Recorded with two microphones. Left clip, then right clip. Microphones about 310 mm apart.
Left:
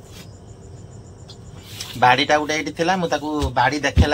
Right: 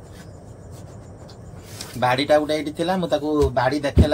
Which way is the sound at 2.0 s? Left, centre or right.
Left.